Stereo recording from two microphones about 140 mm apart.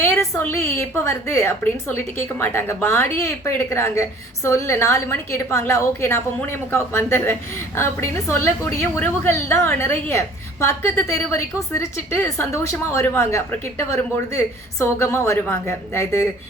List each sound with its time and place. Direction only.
0.0 s a woman's voice: 20° left (ahead or behind)